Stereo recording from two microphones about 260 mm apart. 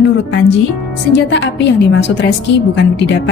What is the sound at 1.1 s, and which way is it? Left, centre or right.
A woman's voice, left.